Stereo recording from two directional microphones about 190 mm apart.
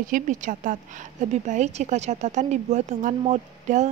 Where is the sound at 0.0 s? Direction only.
45° right (ahead or behind).